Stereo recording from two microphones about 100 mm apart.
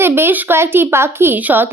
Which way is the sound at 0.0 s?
25° right (ahead or behind).